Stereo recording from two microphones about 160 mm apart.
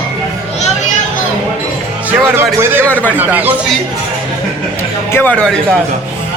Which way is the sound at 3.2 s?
10° right (ahead or behind).